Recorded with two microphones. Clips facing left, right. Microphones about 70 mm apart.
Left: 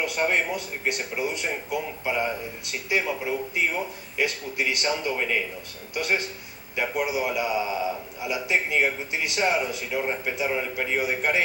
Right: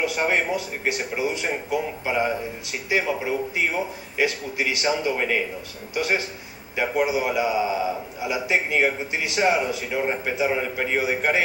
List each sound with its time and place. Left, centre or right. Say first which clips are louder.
0.0 s speech: right 2 dB; centre